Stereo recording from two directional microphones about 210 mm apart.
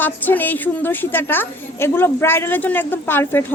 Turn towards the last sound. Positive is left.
turn(degrees=10)  # may be behind; listen again after turning